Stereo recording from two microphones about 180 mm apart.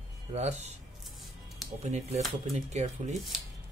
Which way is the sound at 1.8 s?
40° right (ahead or behind).